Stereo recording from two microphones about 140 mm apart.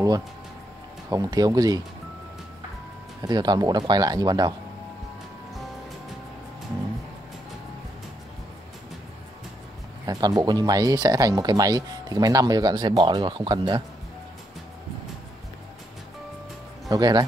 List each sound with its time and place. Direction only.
1.1 s speech: 25° right (ahead or behind)
3.2 s speech: 30° right (ahead or behind)
10.0 s speech: 25° right (ahead or behind)
16.9 s speech: 30° right (ahead or behind)